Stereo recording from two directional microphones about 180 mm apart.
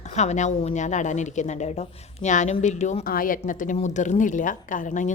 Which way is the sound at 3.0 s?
50° left (ahead or behind).